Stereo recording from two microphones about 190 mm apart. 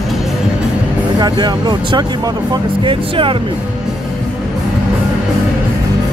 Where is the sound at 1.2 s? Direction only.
20° right (ahead or behind).